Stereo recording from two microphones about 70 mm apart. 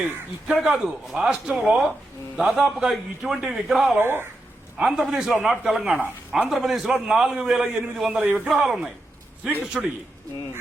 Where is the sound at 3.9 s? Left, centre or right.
Right.